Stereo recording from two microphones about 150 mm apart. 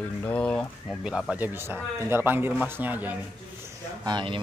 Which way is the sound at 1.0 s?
5° right (ahead or behind).